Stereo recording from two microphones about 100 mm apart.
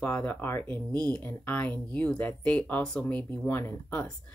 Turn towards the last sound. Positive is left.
turn(degrees=20)  # may be behind; listen again after turning